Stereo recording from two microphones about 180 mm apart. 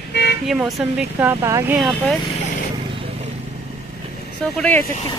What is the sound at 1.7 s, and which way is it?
Speech, centre (ahead or behind).